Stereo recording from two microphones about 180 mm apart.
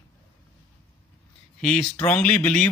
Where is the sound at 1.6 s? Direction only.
5° left (ahead or behind).